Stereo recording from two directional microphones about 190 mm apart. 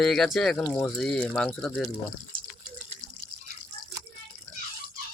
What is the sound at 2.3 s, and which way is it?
Water, 50° right (ahead or behind).